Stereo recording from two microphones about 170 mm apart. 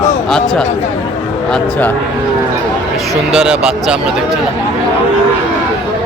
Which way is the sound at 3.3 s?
5° right (ahead or behind).